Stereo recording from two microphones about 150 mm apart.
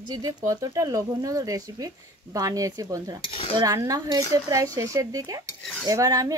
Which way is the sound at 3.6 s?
20° right (ahead or behind).